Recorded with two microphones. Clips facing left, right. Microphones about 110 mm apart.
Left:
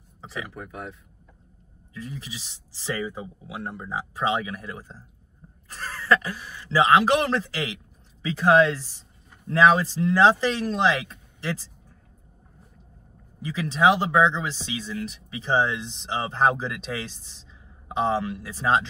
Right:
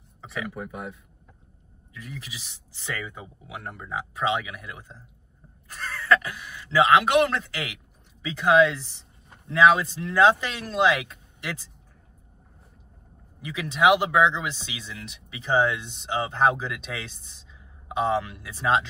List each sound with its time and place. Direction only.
0.2 s a sound: 30° left (ahead or behind)
0.5 s speech: centre (ahead or behind)
2.0 s speech: 30° left (ahead or behind)
13.4 s speech: 35° left (ahead or behind)